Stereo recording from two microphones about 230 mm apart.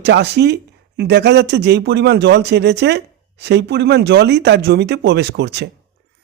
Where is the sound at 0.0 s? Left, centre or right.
Right.